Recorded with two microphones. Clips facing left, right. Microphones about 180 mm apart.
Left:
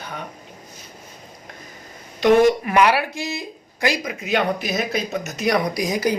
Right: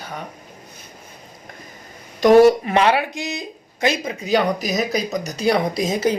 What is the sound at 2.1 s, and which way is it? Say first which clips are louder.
Speech: right 4 dB; 40° right (ahead or behind).